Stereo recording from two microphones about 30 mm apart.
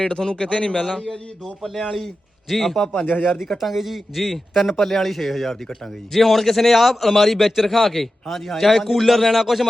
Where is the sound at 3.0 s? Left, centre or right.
Left.